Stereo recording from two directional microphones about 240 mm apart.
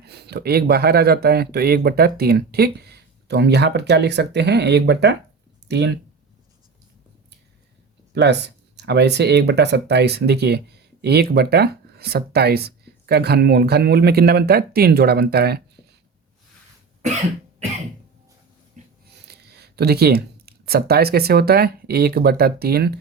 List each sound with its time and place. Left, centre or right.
0.0 s speech: right
8.1 s speech: right
18.8 s wheeze: right
19.1 s speech: right